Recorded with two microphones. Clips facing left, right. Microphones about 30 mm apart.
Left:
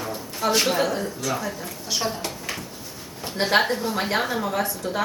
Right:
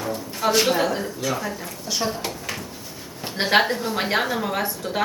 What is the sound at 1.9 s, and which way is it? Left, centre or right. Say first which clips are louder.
Speech: right 1 dB; centre.